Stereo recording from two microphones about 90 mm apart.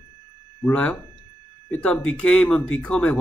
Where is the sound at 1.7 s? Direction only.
10° left (ahead or behind).